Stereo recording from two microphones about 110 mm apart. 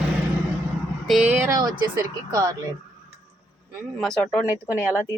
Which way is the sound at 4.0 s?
10° left (ahead or behind).